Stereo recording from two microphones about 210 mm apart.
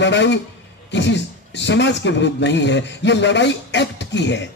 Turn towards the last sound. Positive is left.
turn(degrees=55)  # may be behind; listen again after turning